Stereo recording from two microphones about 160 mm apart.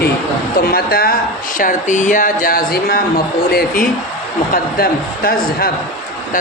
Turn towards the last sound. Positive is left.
turn(degrees=70)  # may be behind; listen again after turning